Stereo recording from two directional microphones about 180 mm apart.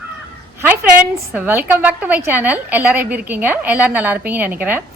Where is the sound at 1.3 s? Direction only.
10° right (ahead or behind).